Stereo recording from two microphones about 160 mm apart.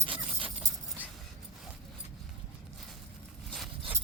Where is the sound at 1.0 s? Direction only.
10° right (ahead or behind).